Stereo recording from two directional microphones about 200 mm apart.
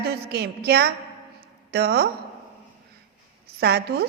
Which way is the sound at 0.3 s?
50° right (ahead or behind).